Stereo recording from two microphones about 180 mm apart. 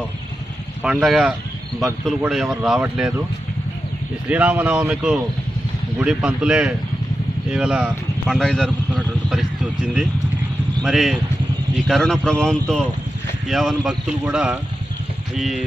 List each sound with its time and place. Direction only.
0.8 s speech: 5° right (ahead or behind)
4.3 s speech: 10° right (ahead or behind)